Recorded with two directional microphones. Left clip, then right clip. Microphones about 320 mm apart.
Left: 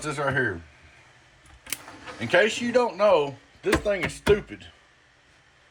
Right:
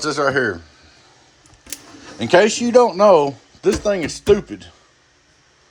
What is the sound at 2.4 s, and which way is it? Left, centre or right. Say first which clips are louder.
Speech: right 8 dB; centre.